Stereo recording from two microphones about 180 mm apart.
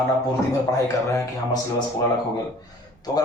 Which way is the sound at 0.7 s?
15° left (ahead or behind).